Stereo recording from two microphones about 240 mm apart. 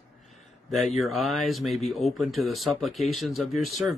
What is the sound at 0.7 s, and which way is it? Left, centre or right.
Speech, centre.